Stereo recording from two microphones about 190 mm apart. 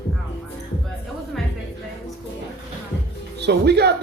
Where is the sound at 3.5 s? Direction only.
60° right (ahead or behind).